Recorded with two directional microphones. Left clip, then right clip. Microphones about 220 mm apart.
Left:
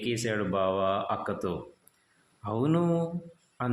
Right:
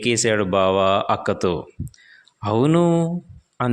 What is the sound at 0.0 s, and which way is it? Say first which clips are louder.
Speech: right 11 dB; 40° right (ahead or behind).